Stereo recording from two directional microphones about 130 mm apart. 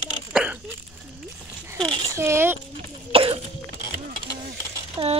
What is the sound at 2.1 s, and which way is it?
Speech, 20° right (ahead or behind).